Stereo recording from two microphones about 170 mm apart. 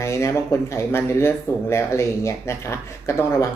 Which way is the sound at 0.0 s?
15° left (ahead or behind).